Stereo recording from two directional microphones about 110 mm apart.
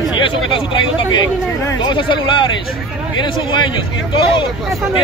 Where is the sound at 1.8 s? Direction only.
45° left (ahead or behind).